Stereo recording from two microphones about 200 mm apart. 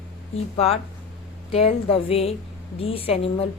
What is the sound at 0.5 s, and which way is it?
A woman's voice, 30° left (ahead or behind).